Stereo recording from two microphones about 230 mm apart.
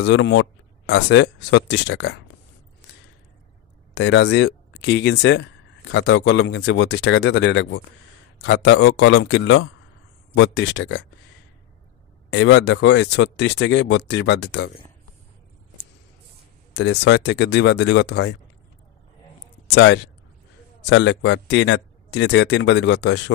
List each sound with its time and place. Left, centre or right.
0.0 s speech: left
3.9 s speech: left
12.3 s speech: left
16.7 s speech: left
19.7 s speech: left